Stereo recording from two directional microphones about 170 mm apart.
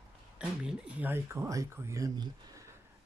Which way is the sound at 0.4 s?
5° right (ahead or behind).